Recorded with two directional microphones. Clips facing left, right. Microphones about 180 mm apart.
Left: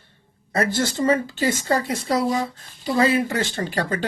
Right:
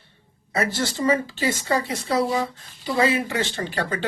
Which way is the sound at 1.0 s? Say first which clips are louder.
Left 1 dB; 45° left (ahead or behind).